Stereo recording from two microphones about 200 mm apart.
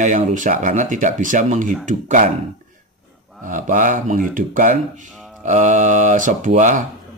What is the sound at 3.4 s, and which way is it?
Speech, 40° right (ahead or behind).